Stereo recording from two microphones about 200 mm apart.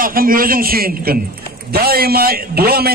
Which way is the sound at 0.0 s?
45° right (ahead or behind).